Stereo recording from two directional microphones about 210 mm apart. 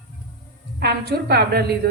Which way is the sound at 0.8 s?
50° right (ahead or behind).